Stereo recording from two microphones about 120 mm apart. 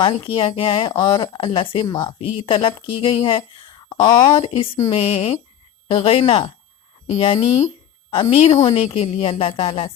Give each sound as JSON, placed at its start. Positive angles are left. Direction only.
{"t": 0.0, "sound": "speech", "side_deg": 45}
{"t": 2.2, "sound": "speech", "side_deg": 50}
{"t": 3.8, "sound": "a sound", "side_deg": 45}
{"t": 4.1, "sound": "speech", "side_deg": 45}